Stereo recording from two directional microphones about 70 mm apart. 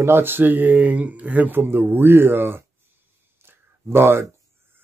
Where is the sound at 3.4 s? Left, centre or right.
Right.